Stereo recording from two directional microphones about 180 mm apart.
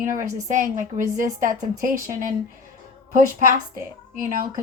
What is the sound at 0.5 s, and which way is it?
A woman's voice, 45° right (ahead or behind).